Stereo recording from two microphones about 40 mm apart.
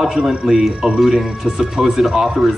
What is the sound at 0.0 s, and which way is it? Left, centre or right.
Speech, centre.